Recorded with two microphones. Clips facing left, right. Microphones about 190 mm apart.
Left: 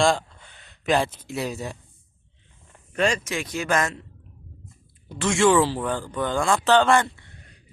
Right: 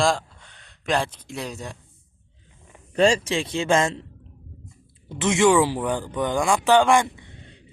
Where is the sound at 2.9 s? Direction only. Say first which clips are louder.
Right 5 dB; 30° right (ahead or behind).